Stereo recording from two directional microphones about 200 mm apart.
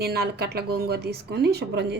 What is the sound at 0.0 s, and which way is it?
Speech, 50° right (ahead or behind).